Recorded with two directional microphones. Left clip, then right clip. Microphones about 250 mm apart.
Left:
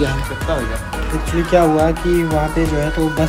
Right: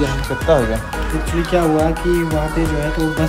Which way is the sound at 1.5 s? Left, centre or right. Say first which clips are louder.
Left 3 dB; centre.